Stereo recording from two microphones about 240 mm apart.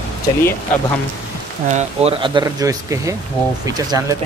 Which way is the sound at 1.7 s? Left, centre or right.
Right.